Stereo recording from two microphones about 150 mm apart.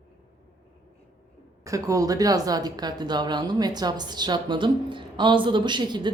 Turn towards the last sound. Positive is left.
turn(degrees=-30)  # may be behind; listen again after turning